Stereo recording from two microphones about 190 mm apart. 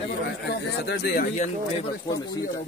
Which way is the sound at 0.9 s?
55° left (ahead or behind).